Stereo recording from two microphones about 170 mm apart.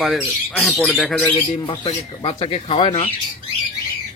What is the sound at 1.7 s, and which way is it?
Speech, 30° left (ahead or behind).